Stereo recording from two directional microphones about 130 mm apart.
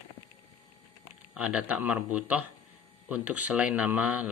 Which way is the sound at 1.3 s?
10° right (ahead or behind).